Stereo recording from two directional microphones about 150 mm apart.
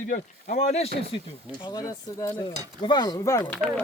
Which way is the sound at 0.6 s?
45° left (ahead or behind).